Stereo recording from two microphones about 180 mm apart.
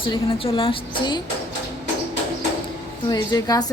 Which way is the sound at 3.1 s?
20° left (ahead or behind).